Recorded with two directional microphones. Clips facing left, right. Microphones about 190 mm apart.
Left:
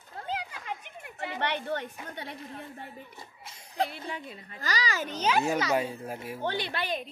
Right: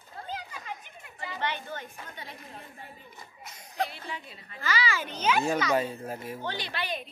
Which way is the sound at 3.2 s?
30° left (ahead or behind).